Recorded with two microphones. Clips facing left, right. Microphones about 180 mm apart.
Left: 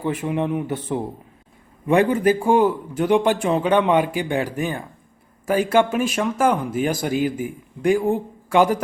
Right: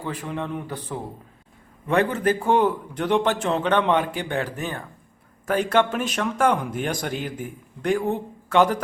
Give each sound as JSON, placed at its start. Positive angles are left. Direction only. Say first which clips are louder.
{"t": 0.0, "sound": "speech", "louder": "left 7 dB", "side_deg": 20}